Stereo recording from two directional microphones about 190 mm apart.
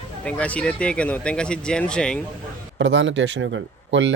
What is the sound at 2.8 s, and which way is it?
Speech, 80° right.